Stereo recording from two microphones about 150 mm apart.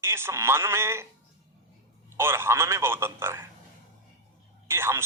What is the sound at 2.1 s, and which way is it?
A man's voice, 15° right (ahead or behind).